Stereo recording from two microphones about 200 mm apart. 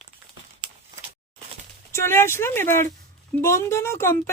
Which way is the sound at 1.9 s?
10° left (ahead or behind).